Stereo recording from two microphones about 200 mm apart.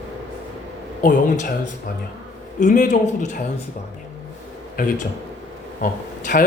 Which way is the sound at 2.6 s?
40° left (ahead or behind).